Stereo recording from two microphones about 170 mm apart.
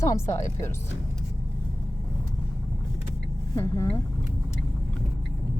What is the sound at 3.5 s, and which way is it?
Speech, 20° left (ahead or behind).